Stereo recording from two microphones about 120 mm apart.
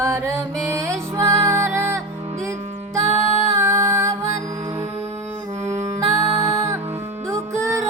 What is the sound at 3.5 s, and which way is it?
Music, 25° right (ahead or behind).